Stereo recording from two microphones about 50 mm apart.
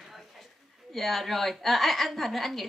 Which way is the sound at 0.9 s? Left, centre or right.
Centre.